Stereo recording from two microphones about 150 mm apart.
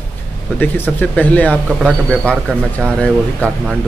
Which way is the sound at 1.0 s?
10° left (ahead or behind).